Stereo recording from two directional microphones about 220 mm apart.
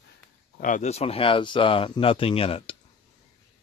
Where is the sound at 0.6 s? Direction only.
35° left (ahead or behind).